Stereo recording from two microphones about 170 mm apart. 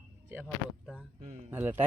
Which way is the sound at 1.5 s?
10° right (ahead or behind).